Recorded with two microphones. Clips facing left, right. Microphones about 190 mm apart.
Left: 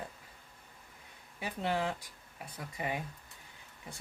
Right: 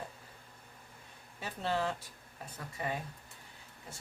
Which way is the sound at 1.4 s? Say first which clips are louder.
Left 1 dB; 15° left (ahead or behind).